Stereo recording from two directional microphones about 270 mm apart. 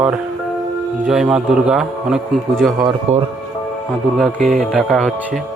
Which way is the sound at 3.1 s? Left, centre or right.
Right.